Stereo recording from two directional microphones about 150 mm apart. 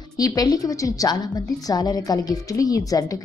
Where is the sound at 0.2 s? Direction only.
25° left (ahead or behind).